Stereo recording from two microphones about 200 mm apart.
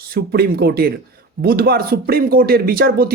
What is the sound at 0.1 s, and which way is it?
A man's voice, 50° right (ahead or behind).